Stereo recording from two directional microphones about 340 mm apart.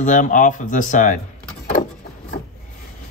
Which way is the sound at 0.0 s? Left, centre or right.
Left.